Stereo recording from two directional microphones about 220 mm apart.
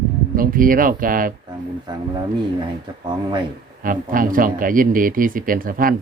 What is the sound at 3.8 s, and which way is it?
Speech, 40° right (ahead or behind).